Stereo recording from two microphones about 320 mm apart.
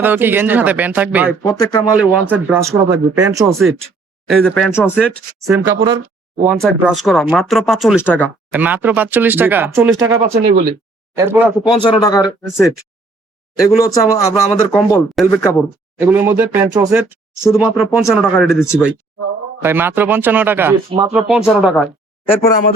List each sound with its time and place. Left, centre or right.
0.0 s speech: centre
1.4 s speech: centre
2.0 s speech: centre
4.3 s speech: centre
5.5 s speech: centre
8.5 s speech: centre
10.3 s speech: right
11.2 s speech: centre
11.6 s speech: centre
13.7 s speech: centre
17.4 s speech: centre